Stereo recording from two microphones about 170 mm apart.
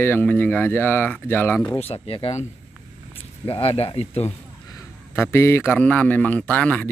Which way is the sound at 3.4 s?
30° left (ahead or behind).